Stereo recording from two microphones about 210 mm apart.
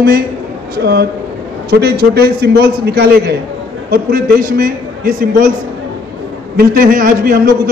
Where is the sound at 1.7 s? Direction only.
50° right (ahead or behind).